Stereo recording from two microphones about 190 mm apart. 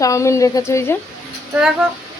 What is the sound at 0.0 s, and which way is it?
Speech, 15° left (ahead or behind).